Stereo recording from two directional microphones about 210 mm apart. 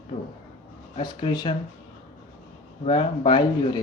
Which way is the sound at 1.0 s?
20° left (ahead or behind).